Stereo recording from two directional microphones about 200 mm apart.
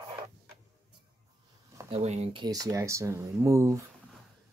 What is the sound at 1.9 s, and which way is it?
Speech, 30° right (ahead or behind).